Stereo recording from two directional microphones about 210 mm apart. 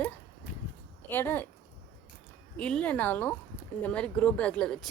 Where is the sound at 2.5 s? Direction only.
5° left (ahead or behind).